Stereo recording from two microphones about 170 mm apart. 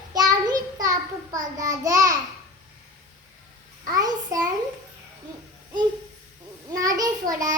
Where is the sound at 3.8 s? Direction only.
20° right (ahead or behind).